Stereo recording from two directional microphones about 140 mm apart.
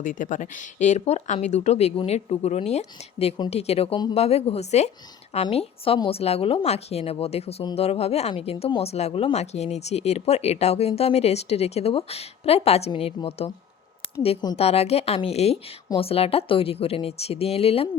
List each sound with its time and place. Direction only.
0.0 s speech: 70° left (ahead or behind); by 13.5 s 45° left (ahead or behind)
14.5 s speech: 45° left (ahead or behind)